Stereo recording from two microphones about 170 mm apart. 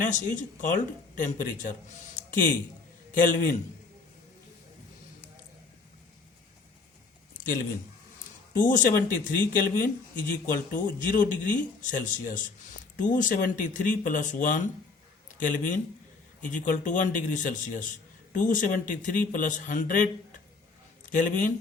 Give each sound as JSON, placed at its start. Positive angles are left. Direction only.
{"t": 0.6, "sound": "speech", "side_deg": 50}
{"t": 3.2, "sound": "speech", "side_deg": 50}
{"t": 7.3, "sound": "a sound", "side_deg": 55}
{"t": 8.7, "sound": "speech", "side_deg": 55}
{"t": 21.1, "sound": "speech", "side_deg": 50}